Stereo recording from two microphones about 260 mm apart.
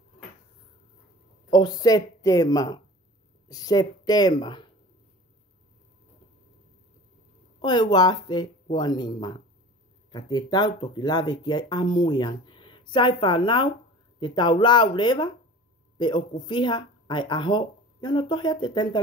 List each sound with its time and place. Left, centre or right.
1.5 s speech: centre
7.6 s speech: centre